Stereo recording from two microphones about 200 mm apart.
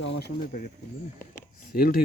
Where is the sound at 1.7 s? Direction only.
50° left (ahead or behind).